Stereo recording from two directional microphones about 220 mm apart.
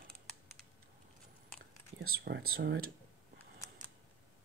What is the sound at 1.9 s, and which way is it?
Speech, 55° right (ahead or behind).